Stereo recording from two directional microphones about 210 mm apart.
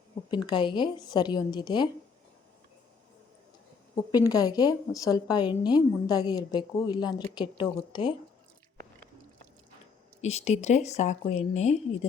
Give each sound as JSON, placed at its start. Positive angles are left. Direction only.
{"t": 0.3, "sound": "a woman's voice", "side_deg": 20}
{"t": 4.1, "sound": "a woman's voice", "side_deg": 15}
{"t": 10.2, "sound": "speech", "side_deg": 30}